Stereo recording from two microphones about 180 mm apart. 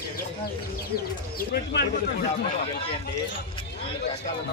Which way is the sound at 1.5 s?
70° left (ahead or behind).